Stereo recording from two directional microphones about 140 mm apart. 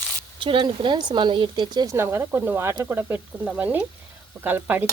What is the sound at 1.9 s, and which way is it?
Speech, 15° right (ahead or behind).